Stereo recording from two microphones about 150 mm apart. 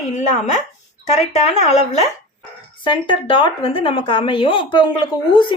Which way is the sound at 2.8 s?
35° left (ahead or behind).